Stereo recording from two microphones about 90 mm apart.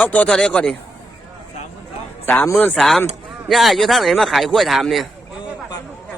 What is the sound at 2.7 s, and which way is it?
A man's voice, 5° left (ahead or behind).